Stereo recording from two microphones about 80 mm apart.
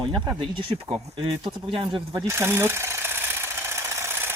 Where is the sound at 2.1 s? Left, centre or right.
Right.